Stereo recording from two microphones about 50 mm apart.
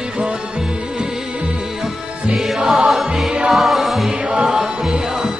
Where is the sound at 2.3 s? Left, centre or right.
Centre.